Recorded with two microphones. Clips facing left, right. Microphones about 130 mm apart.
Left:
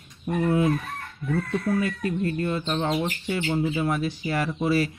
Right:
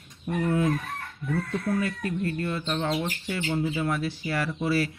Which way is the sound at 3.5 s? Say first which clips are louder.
Left 2 dB; 15° left (ahead or behind).